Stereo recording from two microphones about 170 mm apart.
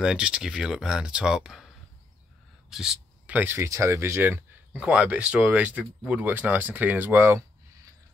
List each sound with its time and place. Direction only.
0.0 s speech: 5° right (ahead or behind)
2.7 s speech: 5° right (ahead or behind)